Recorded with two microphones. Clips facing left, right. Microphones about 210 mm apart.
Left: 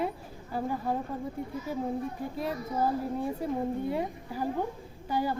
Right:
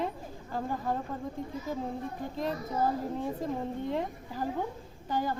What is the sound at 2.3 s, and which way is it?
A woman's voice, 10° left (ahead or behind).